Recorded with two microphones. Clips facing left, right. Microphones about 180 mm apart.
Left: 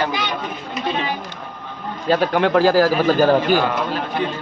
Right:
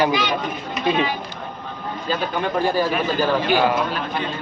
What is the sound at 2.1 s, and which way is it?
Speech, 75° left (ahead or behind).